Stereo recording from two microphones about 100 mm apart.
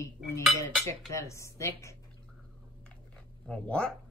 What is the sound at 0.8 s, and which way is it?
Speech, 30° left (ahead or behind).